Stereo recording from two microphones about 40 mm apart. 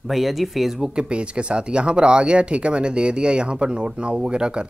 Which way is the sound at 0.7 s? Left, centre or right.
Right.